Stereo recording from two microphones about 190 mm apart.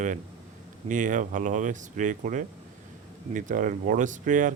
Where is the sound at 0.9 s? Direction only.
40° right (ahead or behind).